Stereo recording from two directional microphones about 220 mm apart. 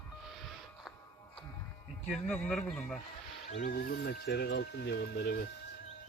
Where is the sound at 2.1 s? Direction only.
5° left (ahead or behind).